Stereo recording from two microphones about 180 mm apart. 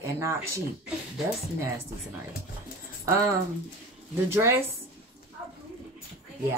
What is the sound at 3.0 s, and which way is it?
Speech, 15° right (ahead or behind).